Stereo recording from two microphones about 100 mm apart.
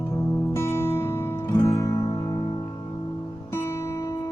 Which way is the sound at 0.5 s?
25° left (ahead or behind).